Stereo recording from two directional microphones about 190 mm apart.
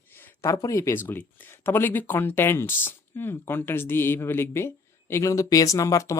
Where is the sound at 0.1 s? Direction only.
10° left (ahead or behind).